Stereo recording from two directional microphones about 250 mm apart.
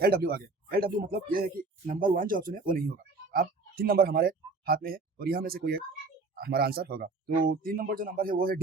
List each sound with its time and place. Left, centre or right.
0.0 s speech: right